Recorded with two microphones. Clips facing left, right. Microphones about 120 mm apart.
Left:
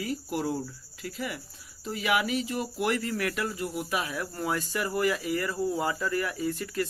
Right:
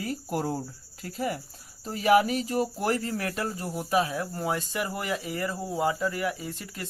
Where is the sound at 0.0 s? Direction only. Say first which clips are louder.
Right 1 dB; 45° right (ahead or behind).